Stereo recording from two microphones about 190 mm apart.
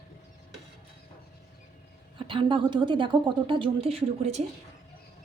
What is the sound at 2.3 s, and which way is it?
A woman's voice, 25° right (ahead or behind).